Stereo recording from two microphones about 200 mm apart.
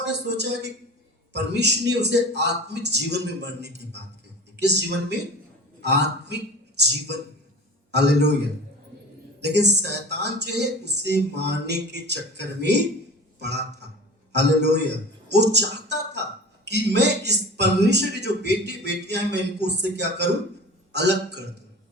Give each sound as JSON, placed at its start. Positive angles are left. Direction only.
{"t": 0.0, "sound": "a man's voice", "side_deg": -55}
{"t": 7.9, "sound": "speech", "side_deg": -55}